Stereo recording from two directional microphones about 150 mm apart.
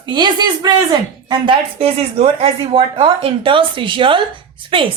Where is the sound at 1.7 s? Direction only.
45° right (ahead or behind).